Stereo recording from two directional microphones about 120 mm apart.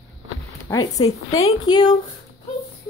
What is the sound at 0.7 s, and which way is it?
A woman's voice, 30° left (ahead or behind).